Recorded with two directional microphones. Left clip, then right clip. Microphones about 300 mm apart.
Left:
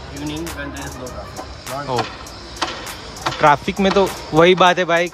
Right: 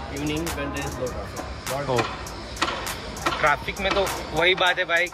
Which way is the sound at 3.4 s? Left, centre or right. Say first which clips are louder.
Left 10 dB; centre.